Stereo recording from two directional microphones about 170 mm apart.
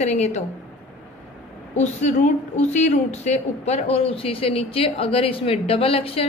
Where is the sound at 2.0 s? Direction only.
45° left (ahead or behind).